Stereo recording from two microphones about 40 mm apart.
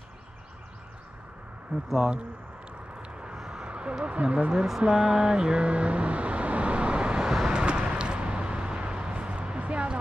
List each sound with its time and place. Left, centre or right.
3.0 s a sound: right
4.0 s speech: right
4.8 s vehicle: centre
7.2 s vehicle: centre
7.5 s vehicle: right